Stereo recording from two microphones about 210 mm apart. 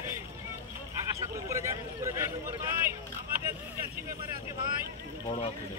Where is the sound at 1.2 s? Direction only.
15° right (ahead or behind).